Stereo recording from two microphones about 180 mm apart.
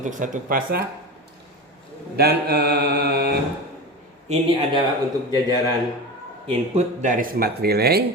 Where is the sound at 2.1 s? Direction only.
60° right (ahead or behind).